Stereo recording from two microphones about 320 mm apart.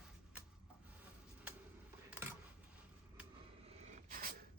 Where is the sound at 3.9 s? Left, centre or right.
Right.